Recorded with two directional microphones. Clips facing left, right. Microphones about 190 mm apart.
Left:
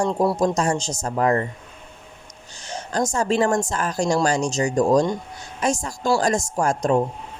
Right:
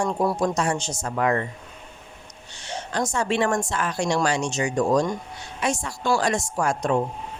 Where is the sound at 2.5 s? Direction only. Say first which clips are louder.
Left 3 dB; 40° left (ahead or behind).